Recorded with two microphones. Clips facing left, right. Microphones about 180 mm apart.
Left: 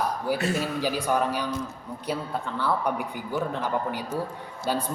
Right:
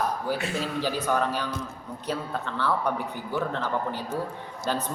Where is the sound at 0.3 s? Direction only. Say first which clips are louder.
Left 3 dB; 40° left (ahead or behind).